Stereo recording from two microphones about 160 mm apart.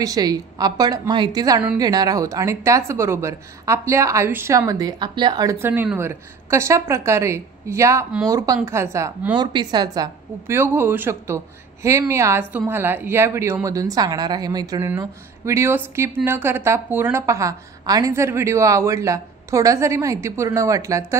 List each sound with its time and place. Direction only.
0.0 s a woman's voice: 25° right (ahead or behind)
9.4 s a woman's voice: 30° right (ahead or behind)